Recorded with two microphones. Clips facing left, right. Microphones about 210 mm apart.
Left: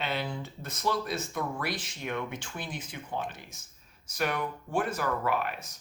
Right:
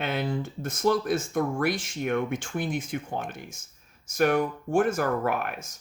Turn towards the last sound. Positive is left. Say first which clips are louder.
# right 2 dB
turn(degrees=-50)  # may be behind; listen again after turning